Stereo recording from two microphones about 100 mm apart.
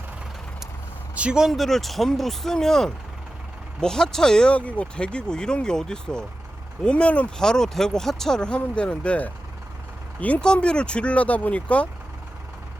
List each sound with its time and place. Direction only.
1.1 s speech: 10° right (ahead or behind); by 11.9 s 15° left (ahead or behind)